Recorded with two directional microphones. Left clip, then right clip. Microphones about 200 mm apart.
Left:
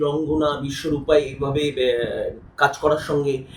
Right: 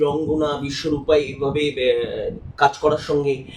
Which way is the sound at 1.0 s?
5° right (ahead or behind).